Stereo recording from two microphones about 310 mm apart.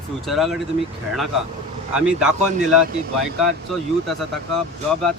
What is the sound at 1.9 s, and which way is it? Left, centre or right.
Speech, centre.